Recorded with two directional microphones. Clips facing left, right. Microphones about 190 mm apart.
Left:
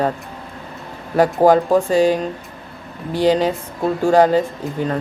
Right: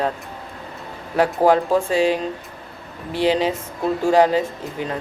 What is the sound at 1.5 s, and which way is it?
Speech, centre (ahead or behind).